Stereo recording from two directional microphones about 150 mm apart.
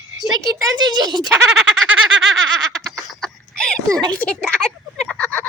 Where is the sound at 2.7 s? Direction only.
5° left (ahead or behind).